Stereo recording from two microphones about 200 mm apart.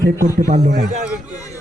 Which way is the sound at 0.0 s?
15° right (ahead or behind).